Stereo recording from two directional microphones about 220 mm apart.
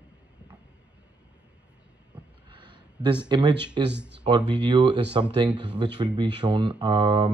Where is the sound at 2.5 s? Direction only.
20° right (ahead or behind).